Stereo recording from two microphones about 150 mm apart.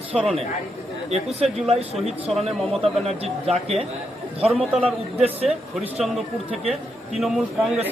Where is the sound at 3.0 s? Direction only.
45° right (ahead or behind).